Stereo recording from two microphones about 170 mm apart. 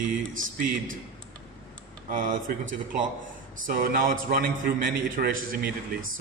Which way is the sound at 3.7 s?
60° right (ahead or behind).